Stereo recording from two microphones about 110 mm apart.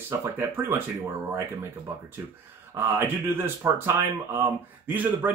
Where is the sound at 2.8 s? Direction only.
25° right (ahead or behind).